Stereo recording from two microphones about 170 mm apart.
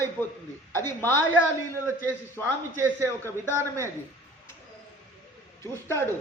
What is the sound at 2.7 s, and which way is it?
Speech, 15° right (ahead or behind).